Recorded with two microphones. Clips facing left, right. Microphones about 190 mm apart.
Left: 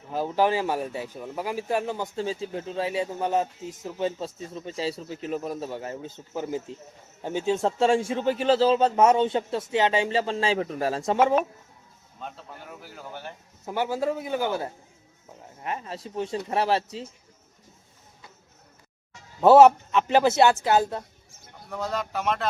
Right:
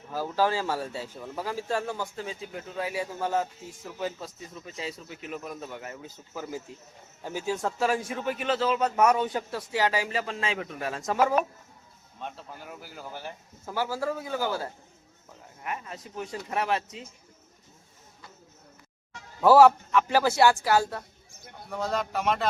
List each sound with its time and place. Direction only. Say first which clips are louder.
0.1 s speech: left 3 dB; 20° left (ahead or behind)
2.2 s a man's voice: left 7 dB; 30° left (ahead or behind)
12.2 s a man's voice: even; centre (ahead or behind)
13.7 s a man's voice: left 3 dB; 20° left (ahead or behind)
19.4 s a man's voice: left 3 dB; 20° left (ahead or behind)
21.7 s a man's voice: even; centre (ahead or behind)